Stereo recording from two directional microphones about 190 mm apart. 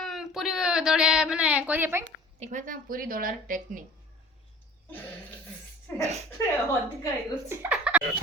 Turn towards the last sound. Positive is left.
turn(degrees=-5)  # may be behind; listen again after turning